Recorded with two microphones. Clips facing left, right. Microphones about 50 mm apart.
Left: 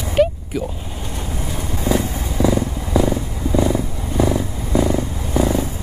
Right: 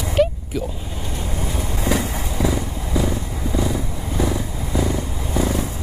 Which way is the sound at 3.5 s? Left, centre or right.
Centre.